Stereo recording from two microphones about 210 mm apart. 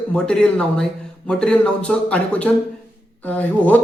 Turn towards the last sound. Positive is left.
turn(degrees=10)  # may be behind; listen again after turning